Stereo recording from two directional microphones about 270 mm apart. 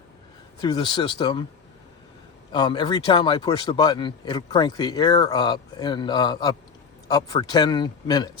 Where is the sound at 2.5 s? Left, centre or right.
Centre.